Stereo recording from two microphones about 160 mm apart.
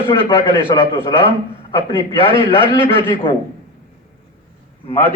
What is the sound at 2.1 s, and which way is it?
Speech, 35° left (ahead or behind).